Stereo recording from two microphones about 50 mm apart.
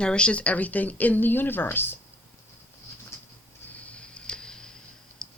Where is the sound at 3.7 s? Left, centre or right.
Left.